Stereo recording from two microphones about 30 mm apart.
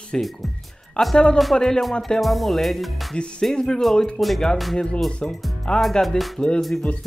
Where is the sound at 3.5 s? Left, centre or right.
Left.